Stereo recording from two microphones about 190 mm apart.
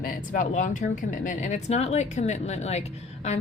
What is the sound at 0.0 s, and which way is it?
Speech, 45° left (ahead or behind).